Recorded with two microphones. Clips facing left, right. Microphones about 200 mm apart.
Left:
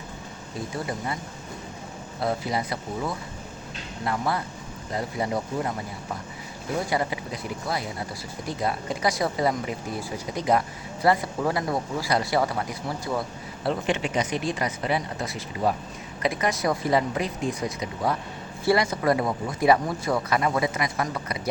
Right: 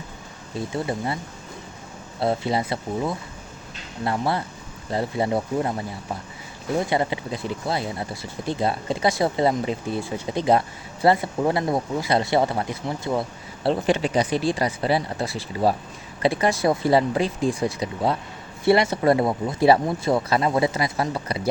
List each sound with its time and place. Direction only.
0.9 s speech: 30° right (ahead or behind)
2.2 s speech: 25° right (ahead or behind)
6.9 s speech: 25° right (ahead or behind)
13.7 s speech: 35° right (ahead or behind)